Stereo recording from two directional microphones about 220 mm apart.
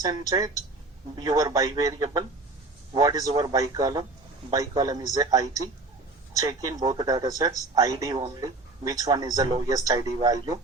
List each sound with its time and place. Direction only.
0.0 s speech: 15° right (ahead or behind)
6.8 s speech: 20° right (ahead or behind)